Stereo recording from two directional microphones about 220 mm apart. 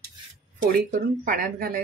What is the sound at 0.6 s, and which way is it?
Speech, 35° right (ahead or behind).